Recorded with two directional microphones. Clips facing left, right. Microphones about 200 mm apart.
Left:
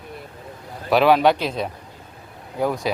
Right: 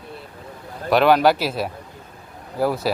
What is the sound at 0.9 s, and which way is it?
A man's voice, centre (ahead or behind).